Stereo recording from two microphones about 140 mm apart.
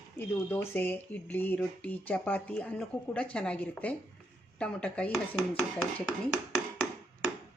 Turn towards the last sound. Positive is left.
turn(degrees=-5)  # may be behind; listen again after turning